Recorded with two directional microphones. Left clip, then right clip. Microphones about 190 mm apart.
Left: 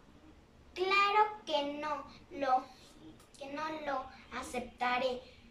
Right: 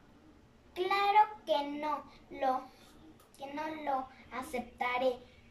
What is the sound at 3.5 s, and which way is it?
A child's voice, 25° right (ahead or behind).